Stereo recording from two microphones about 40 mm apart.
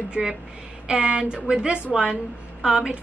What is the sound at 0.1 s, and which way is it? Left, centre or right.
A woman's voice, right.